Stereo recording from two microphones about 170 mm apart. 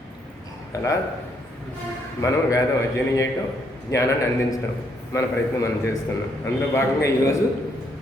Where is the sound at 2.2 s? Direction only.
20° left (ahead or behind).